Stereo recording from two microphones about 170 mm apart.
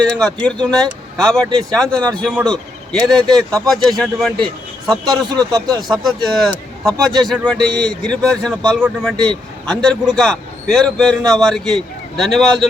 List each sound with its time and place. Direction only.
0.0 s a man's voice: 5° left (ahead or behind)
4.4 s speech: 25° right (ahead or behind)
5.9 s a man's voice: centre (ahead or behind)